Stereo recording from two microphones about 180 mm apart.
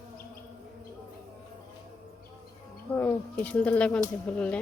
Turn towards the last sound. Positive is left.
turn(degrees=5)  # may be behind; listen again after turning